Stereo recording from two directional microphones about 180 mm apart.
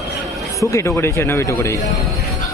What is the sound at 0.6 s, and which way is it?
Speech, 15° left (ahead or behind).